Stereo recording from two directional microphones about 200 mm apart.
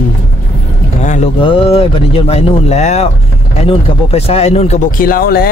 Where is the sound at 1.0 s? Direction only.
35° left (ahead or behind).